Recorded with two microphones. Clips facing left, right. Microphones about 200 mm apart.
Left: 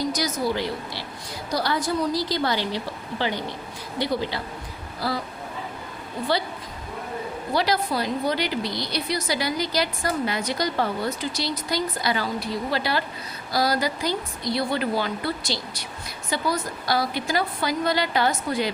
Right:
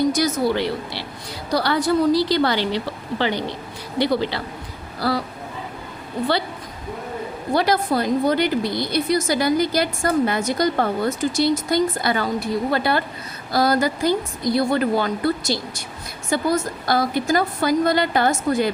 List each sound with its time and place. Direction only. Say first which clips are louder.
0.1 s a woman's voice: right 5 dB; 55° right (ahead or behind)
7.5 s a woman's voice: right 5 dB; 50° right (ahead or behind)